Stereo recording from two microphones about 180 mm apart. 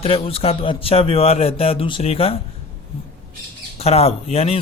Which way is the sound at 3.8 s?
35° left (ahead or behind).